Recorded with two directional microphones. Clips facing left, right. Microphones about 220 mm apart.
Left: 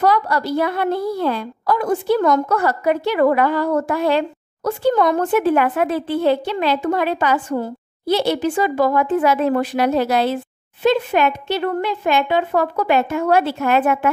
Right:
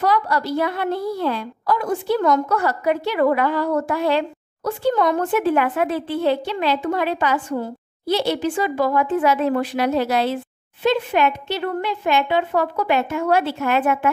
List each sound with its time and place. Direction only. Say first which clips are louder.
0.0 s a woman's voice: left 2 dB; 45° left (ahead or behind)